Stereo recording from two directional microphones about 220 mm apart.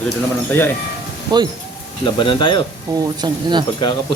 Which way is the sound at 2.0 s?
20° left (ahead or behind).